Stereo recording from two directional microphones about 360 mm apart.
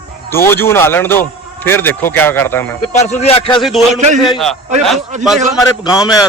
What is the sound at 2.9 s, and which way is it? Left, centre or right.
Speech, centre.